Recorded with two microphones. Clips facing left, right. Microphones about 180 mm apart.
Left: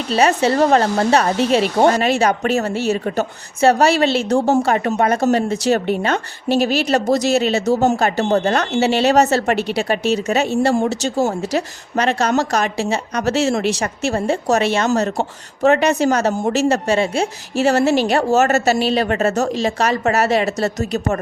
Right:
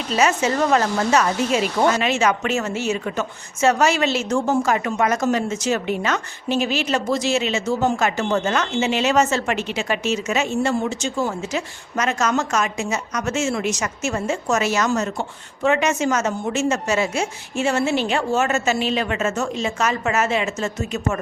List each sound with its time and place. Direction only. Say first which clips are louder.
0.1 s a woman's voice: left 4 dB; 30° left (ahead or behind)